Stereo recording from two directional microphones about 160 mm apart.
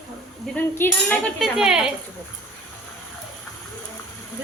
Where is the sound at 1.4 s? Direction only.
5° right (ahead or behind).